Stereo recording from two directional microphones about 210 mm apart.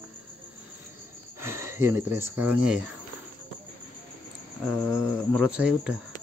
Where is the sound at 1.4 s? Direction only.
10° right (ahead or behind).